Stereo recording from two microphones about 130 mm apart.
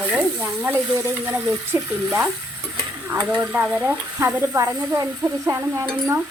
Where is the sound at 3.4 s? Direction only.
10° right (ahead or behind).